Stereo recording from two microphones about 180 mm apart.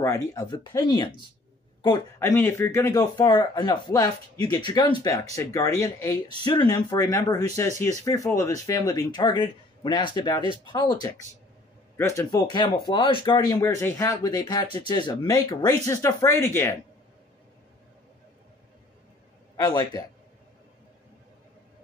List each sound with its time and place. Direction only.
0.0 s speech: 15° left (ahead or behind)
2.1 s speech: 10° left (ahead or behind)
13.6 s speech: 15° left (ahead or behind)
19.5 s speech: 20° left (ahead or behind)